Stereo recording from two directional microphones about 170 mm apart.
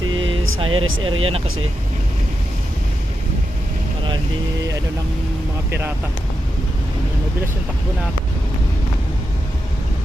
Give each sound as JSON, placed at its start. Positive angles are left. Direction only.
{"t": 0.2, "sound": "speech", "side_deg": -30}